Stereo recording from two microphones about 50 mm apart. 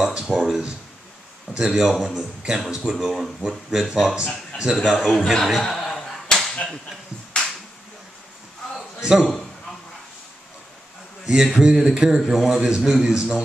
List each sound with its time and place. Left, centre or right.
0.1 s a sound: centre
1.6 s speech: centre
4.7 s slap: centre
6.5 s whip: left
9.2 s a man's voice: centre
11.2 s speech: centre